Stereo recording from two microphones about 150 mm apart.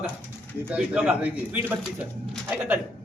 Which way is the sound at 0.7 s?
10° right (ahead or behind).